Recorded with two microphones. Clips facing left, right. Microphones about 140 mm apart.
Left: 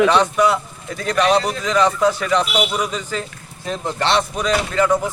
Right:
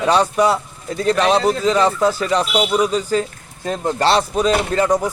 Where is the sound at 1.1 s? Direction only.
30° right (ahead or behind).